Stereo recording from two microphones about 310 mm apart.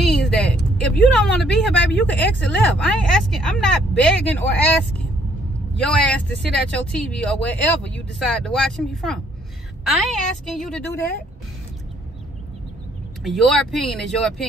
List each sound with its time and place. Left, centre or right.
0.3 s a sound: centre
0.7 s speech: centre
10.4 s speech: centre
13.2 s speech: centre